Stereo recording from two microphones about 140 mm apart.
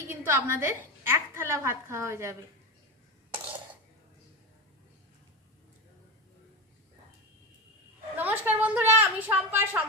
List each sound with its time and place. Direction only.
0.1 s a woman's voice: 15° right (ahead or behind)
8.2 s a woman's voice: 15° right (ahead or behind)